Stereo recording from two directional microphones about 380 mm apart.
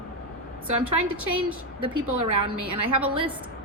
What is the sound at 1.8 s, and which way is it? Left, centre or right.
Speech, right.